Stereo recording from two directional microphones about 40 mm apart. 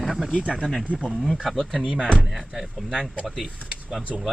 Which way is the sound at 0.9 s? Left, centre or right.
Centre.